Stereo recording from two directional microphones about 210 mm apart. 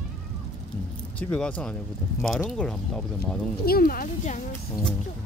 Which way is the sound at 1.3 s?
5° left (ahead or behind).